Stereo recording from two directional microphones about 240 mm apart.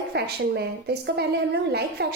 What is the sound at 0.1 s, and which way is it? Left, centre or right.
A woman's voice, right.